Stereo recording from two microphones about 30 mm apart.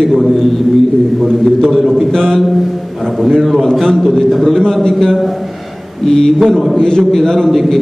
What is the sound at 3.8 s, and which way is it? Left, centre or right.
Speech, centre.